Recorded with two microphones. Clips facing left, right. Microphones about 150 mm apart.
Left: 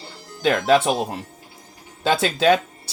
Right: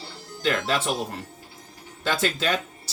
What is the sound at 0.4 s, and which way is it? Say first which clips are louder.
Speech: left 7 dB; 60° left (ahead or behind).